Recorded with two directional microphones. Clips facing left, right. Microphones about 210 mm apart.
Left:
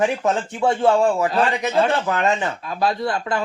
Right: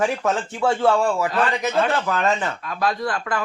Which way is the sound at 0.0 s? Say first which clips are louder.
Left 2 dB; 20° left (ahead or behind).